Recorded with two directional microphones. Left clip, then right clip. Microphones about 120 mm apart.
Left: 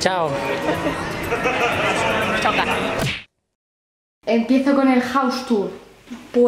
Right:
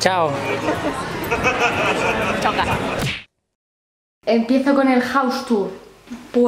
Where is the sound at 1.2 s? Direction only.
25° right (ahead or behind).